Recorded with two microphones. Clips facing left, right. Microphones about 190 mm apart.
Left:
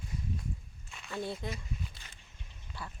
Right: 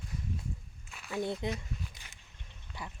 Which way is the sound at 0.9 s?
5° right (ahead or behind).